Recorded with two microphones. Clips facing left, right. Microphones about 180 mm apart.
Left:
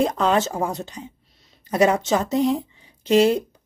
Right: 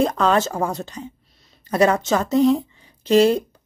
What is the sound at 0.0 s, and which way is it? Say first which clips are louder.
Speech: right 1 dB; 15° left (ahead or behind).